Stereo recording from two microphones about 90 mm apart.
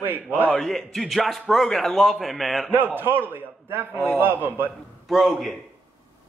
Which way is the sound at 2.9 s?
25° right (ahead or behind).